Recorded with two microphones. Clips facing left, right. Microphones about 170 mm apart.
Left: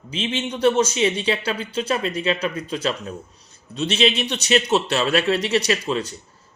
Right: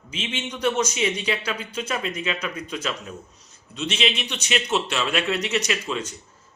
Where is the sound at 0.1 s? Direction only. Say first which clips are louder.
Left 6 dB; 30° left (ahead or behind).